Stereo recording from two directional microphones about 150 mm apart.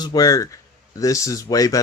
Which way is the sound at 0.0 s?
25° left (ahead or behind).